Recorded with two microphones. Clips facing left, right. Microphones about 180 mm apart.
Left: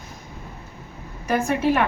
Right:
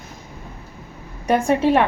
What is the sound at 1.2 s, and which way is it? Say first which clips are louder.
Speech: right 4 dB; 30° right (ahead or behind).